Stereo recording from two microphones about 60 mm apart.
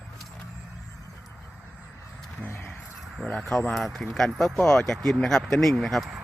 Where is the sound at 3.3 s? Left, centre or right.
Centre.